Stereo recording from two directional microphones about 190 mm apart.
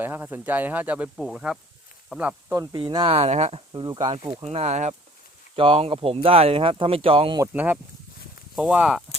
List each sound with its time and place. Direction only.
0.0 s speech: 10° right (ahead or behind)
2.6 s speech: 20° right (ahead or behind)
3.7 s speech: 20° right (ahead or behind)
4.4 s speech: 35° right (ahead or behind)
7.5 s speech: 10° right (ahead or behind)